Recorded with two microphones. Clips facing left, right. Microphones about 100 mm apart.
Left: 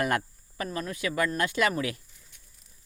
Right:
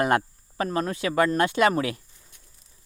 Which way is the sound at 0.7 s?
45° right (ahead or behind).